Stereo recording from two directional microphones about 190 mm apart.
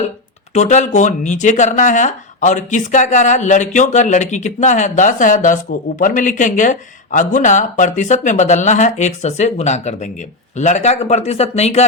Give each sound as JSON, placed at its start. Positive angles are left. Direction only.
{"t": 0.5, "sound": "speech", "side_deg": 40}